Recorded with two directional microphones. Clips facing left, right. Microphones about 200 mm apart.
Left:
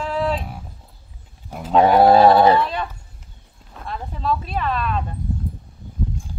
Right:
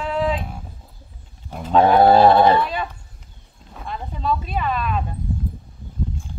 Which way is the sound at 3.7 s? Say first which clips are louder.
Even; centre (ahead or behind).